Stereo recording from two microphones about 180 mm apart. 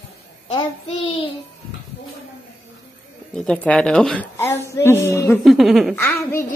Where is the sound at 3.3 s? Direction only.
5° left (ahead or behind).